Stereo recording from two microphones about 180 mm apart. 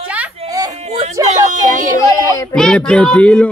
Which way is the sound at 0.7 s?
40° right (ahead or behind).